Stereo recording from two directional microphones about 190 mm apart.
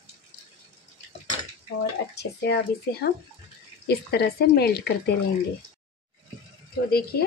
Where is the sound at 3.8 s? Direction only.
55° left (ahead or behind).